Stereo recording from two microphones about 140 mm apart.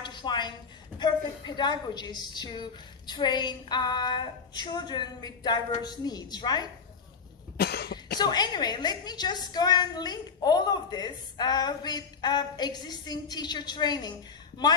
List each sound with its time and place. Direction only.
0.0 s a woman's voice: 35° left (ahead or behind)
8.2 s a woman's voice: 30° left (ahead or behind)